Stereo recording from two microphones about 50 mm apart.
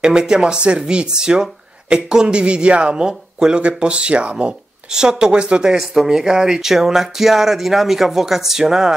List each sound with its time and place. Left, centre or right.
0.0 s speech: centre